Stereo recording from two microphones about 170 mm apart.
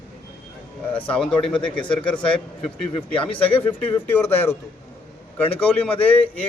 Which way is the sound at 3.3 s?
30° left (ahead or behind).